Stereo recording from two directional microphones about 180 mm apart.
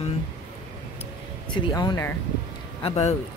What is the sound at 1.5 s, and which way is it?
Speech, 25° left (ahead or behind).